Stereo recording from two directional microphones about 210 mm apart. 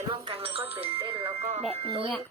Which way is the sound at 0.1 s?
25° right (ahead or behind).